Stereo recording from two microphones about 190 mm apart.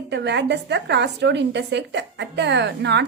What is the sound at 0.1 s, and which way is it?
A woman's voice, 65° right (ahead or behind).